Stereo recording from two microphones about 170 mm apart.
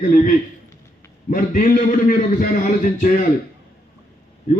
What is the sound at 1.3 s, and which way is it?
A man's voice, 55° left (ahead or behind).